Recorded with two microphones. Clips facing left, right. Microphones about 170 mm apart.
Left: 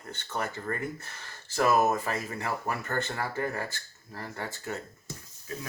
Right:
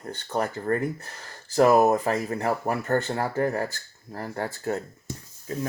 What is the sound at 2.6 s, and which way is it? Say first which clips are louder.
Speech: right 7 dB; 35° right (ahead or behind).